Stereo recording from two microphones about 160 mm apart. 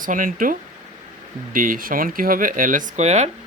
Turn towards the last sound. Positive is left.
turn(degrees=-45)  # may be behind; listen again after turning